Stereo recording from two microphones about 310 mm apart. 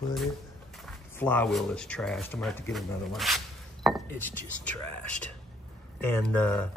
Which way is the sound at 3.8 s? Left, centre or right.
Centre.